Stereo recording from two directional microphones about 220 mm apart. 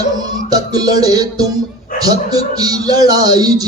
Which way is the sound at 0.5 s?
15° right (ahead or behind).